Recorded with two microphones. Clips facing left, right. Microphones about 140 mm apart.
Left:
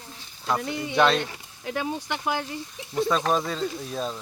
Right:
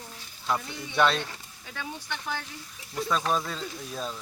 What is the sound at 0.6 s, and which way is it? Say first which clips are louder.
Speech: left 4 dB; 65° left (ahead or behind).